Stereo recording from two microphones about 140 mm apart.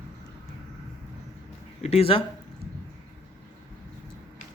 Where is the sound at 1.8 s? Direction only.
45° left (ahead or behind).